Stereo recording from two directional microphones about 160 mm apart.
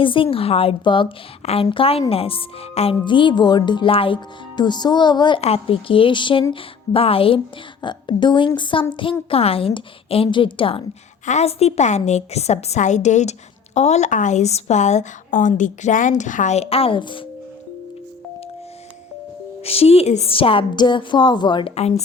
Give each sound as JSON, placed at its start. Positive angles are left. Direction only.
{"t": 0.0, "sound": "a woman's voice", "side_deg": 35}
{"t": 19.6, "sound": "a woman's voice", "side_deg": 40}